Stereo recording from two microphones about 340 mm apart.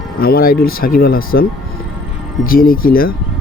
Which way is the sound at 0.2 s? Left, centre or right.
Left.